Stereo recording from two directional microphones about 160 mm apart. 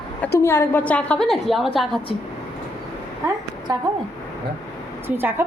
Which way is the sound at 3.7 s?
25° right (ahead or behind).